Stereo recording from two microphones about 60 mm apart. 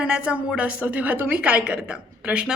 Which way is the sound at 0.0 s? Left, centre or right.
Centre.